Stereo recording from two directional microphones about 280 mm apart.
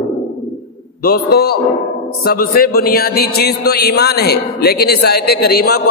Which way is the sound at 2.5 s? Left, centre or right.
Left.